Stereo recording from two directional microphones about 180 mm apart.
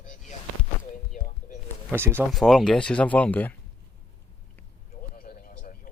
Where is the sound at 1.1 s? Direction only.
45° left (ahead or behind).